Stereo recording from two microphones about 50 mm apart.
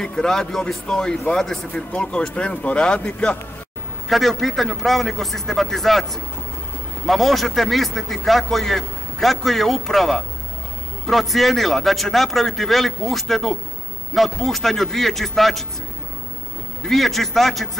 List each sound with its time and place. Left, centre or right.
0.0 s speech: centre
1.7 s speech: left
4.1 s a man's voice: centre
16.8 s a man's voice: centre